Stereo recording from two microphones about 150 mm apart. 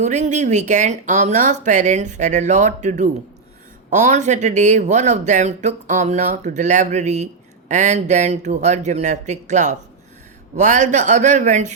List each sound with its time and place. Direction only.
0.0 s speech: 50° right (ahead or behind)